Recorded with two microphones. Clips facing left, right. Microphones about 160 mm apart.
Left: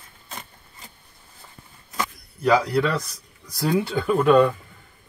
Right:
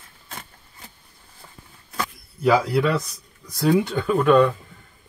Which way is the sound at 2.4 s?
5° right (ahead or behind).